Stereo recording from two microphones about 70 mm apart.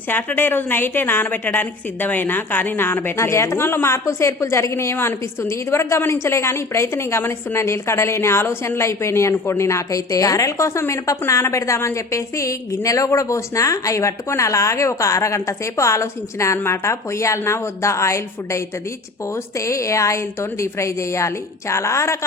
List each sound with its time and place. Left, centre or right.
0.1 s a woman's voice: left